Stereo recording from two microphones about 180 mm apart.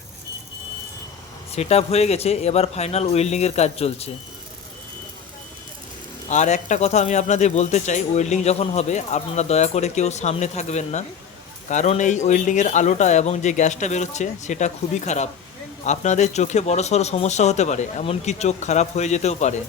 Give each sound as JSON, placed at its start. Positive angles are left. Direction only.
{"t": 1.5, "sound": "speech", "side_deg": 35}
{"t": 6.2, "sound": "speech", "side_deg": 40}